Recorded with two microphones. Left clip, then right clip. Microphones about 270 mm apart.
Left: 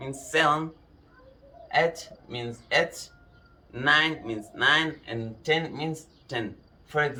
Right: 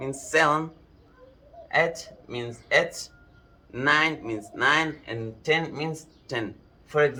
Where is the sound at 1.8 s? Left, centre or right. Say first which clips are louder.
Right 1 dB; centre.